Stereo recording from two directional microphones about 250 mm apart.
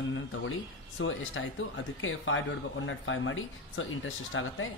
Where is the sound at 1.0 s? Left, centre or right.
Left.